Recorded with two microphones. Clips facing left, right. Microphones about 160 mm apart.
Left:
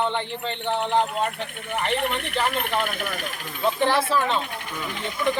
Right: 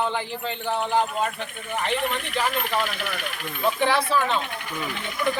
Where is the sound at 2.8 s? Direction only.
50° left (ahead or behind).